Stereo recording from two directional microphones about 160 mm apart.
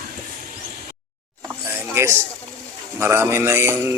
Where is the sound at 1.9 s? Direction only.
15° right (ahead or behind).